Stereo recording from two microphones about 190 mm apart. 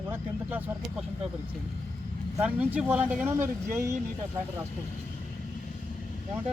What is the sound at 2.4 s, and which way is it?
Speech, 5° right (ahead or behind).